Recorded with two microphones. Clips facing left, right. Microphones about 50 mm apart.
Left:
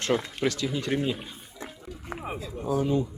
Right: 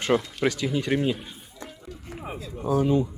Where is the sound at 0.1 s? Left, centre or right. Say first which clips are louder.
Right 3 dB; centre.